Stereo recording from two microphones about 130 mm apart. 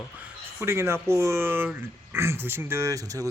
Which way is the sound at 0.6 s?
20° right (ahead or behind).